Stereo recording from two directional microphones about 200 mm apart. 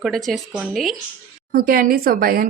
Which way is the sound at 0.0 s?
Centre (ahead or behind).